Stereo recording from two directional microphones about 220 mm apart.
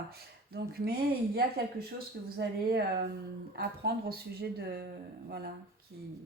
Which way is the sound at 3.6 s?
45° right (ahead or behind).